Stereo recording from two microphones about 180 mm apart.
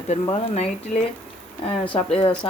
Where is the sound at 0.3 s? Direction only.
35° left (ahead or behind).